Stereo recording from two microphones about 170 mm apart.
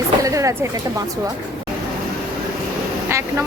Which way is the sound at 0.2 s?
20° right (ahead or behind).